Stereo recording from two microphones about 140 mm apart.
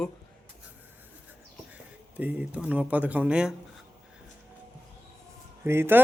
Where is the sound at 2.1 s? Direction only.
10° right (ahead or behind).